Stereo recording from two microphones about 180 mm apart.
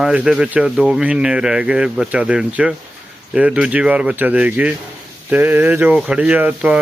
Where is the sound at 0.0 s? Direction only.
5° right (ahead or behind).